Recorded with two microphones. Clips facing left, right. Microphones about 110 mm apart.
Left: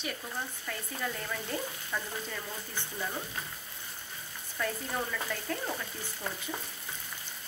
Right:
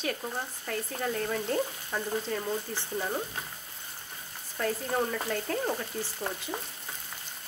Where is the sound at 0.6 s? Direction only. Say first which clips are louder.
Right 4 dB; 40° right (ahead or behind).